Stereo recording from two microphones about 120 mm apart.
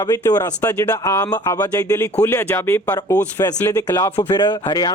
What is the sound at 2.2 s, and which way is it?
Speech, 20° left (ahead or behind).